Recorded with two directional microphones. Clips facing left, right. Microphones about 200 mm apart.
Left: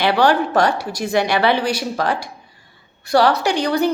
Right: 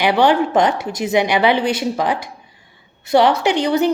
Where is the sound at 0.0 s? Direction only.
20° right (ahead or behind).